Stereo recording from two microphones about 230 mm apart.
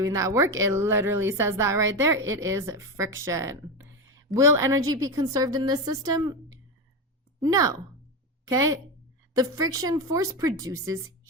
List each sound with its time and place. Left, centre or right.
0.0 s speech: centre